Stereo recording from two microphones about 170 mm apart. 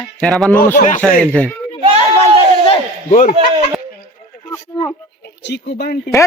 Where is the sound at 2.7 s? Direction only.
45° left (ahead or behind).